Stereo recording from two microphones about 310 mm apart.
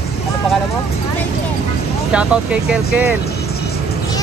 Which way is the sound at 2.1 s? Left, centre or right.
Centre.